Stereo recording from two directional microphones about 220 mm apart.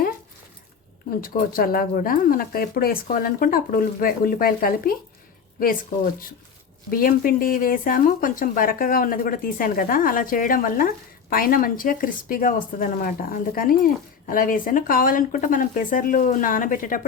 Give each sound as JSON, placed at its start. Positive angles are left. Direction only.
{"t": 1.2, "sound": "speech", "side_deg": 40}
{"t": 6.9, "sound": "speech", "side_deg": 40}